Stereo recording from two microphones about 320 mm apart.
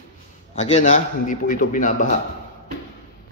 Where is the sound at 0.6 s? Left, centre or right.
Left.